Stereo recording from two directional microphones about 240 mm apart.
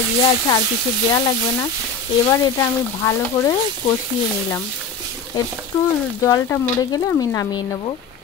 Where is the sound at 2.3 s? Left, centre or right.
Centre.